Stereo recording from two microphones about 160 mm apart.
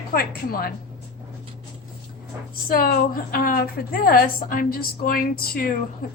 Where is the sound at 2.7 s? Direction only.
65° left (ahead or behind).